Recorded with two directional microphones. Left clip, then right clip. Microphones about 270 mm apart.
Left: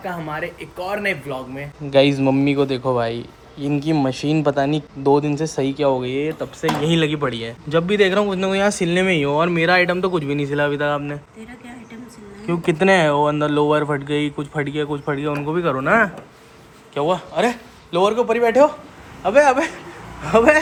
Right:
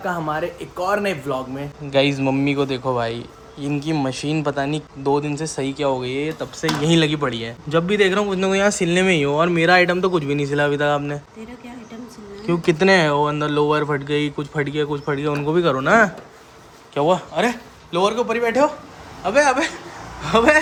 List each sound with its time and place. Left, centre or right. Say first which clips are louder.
0.0 s speech: right 3 dB; centre
3.1 s speech: left 1 dB; right
3.7 s speech: left 3 dB; centre
12.5 s a man's voice: even; centre